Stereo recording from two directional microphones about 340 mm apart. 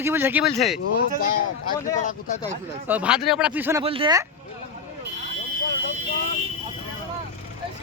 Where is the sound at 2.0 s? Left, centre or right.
Left.